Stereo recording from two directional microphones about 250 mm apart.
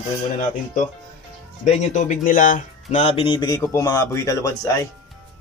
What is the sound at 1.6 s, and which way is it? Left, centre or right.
Speech, left.